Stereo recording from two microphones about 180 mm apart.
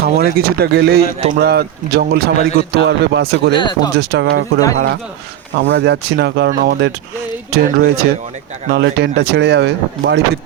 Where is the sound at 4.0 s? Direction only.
65° right (ahead or behind); by 5.0 s 80° right.